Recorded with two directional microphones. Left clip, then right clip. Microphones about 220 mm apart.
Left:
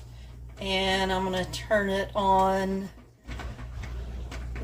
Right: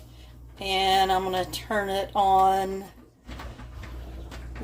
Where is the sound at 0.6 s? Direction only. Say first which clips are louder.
Right 4 dB; 40° right (ahead or behind).